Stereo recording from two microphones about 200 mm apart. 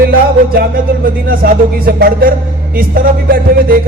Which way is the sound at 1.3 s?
45° right (ahead or behind).